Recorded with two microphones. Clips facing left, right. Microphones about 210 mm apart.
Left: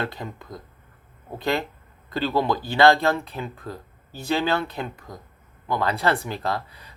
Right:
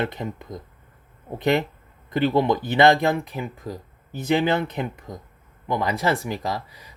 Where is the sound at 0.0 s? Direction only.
20° right (ahead or behind).